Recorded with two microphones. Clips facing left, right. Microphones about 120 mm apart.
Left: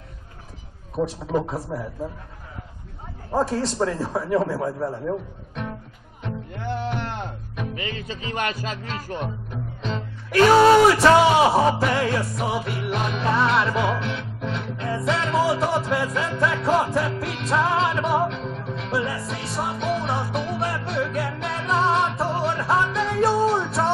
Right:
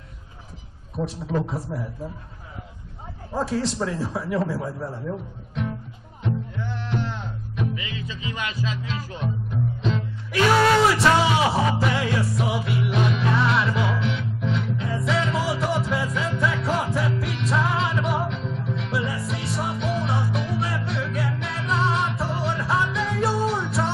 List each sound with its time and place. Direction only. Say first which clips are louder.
0.9 s a man's voice: left 3 dB; 40° left (ahead or behind)
3.3 s a man's voice: left 2 dB; 45° left (ahead or behind)
6.5 s music: left 2 dB; 60° left (ahead or behind); by 10.5 s 40° left (ahead or behind)
10.5 s music: left 5 dB; 25° left (ahead or behind)
11.0 s music: left 4 dB; 40° left (ahead or behind)